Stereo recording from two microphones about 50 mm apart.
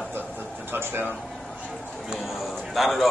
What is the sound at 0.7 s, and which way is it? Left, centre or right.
Speech, right.